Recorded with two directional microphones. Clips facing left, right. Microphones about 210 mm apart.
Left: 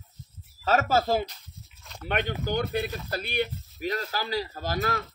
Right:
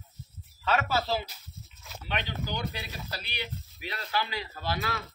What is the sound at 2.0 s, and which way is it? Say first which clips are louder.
Speech: left 6 dB; 55° left (ahead or behind).